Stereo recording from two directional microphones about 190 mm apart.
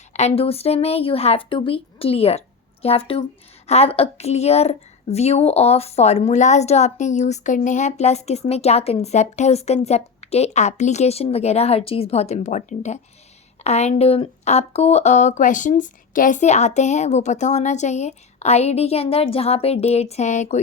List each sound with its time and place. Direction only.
0.1 s a woman's voice: 35° left (ahead or behind)